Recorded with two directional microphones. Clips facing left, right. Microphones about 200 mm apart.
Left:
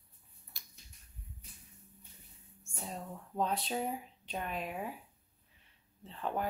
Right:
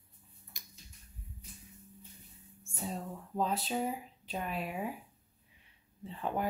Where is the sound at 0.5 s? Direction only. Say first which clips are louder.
Right 3 dB; 15° right (ahead or behind).